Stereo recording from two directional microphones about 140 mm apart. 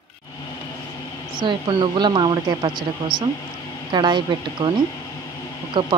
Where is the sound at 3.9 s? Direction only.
30° right (ahead or behind).